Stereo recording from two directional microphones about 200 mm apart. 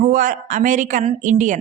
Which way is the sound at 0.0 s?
45° right (ahead or behind).